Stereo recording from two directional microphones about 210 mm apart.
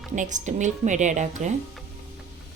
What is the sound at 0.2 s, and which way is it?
A woman's voice, 35° right (ahead or behind).